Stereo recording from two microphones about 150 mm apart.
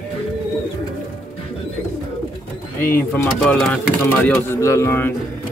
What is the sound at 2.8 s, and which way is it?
Speech, 15° left (ahead or behind).